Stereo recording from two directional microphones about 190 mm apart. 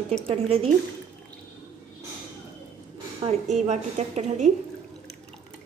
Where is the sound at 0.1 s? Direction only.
35° right (ahead or behind).